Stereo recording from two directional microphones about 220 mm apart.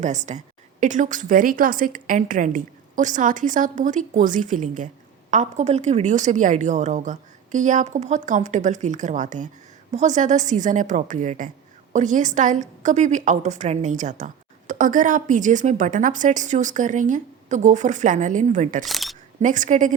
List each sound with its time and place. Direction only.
0.0 s a woman's voice: 35° right (ahead or behind)
18.9 s speech: centre (ahead or behind)
19.4 s a woman's voice: 35° right (ahead or behind)